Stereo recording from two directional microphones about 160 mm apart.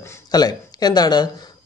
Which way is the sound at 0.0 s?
20° left (ahead or behind).